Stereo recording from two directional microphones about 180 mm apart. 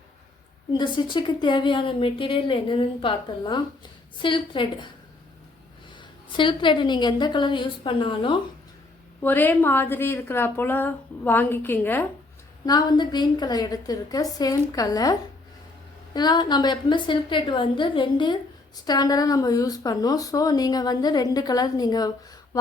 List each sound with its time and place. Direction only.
0.7 s a woman's voice: 25° left (ahead or behind)
6.0 s a woman's voice: 25° left (ahead or behind)
9.2 s a woman's voice: 10° left (ahead or behind)
12.6 s a woman's voice: 20° left (ahead or behind)